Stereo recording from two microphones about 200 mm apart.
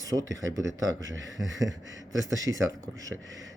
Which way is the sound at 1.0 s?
70° right (ahead or behind).